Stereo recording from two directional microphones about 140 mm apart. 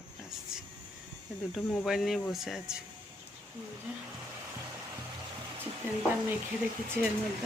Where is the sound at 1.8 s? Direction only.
Centre (ahead or behind).